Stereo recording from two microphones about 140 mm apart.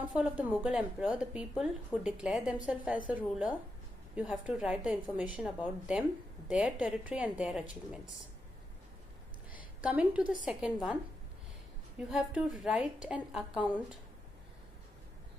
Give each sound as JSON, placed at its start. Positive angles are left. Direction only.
{"t": 0.1, "sound": "a woman's voice", "side_deg": -10}
{"t": 9.8, "sound": "a woman's voice", "side_deg": -10}
{"t": 12.1, "sound": "a woman's voice", "side_deg": -5}